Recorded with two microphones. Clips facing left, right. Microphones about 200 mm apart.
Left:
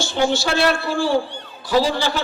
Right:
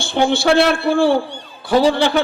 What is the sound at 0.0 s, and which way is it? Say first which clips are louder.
A man's voice: right 4 dB; 55° right (ahead or behind).